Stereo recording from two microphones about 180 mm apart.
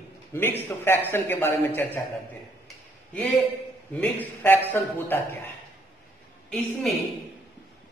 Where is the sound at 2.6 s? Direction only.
5° left (ahead or behind).